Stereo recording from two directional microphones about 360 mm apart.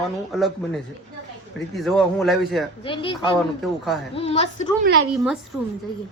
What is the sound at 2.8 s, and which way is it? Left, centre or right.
A woman's voice, centre.